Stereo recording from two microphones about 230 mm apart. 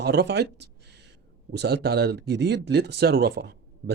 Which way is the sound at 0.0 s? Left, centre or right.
Right.